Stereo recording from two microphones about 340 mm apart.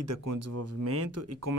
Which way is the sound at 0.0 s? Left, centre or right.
Right.